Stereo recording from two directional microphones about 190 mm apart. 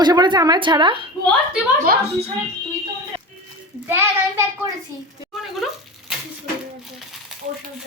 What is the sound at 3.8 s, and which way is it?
Speech, 10° right (ahead or behind).